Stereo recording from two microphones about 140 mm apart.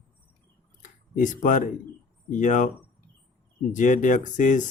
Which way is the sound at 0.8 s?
65° left (ahead or behind).